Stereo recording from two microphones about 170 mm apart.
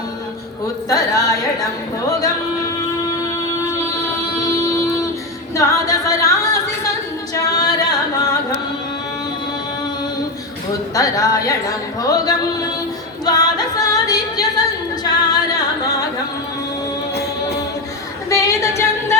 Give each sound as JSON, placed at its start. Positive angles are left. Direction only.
{"t": 0.9, "sound": "speech", "side_deg": 20}
{"t": 2.0, "sound": "music", "side_deg": 20}
{"t": 4.4, "sound": "music", "side_deg": 20}
{"t": 5.5, "sound": "a capella", "side_deg": 20}
{"t": 7.3, "sound": "singing", "side_deg": 20}
{"t": 10.9, "sound": "speech", "side_deg": 20}
{"t": 13.2, "sound": "singing", "side_deg": 25}
{"t": 18.3, "sound": "music", "side_deg": 20}